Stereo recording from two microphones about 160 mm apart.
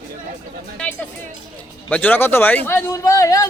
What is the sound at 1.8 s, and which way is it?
Speech, 10° left (ahead or behind).